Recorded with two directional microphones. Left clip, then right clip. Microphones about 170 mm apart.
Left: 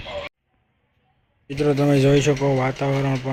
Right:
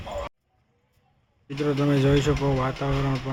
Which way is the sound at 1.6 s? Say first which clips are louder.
Left 5 dB; 20° left (ahead or behind).